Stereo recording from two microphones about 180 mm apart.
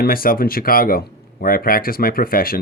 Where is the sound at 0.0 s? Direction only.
55° left (ahead or behind).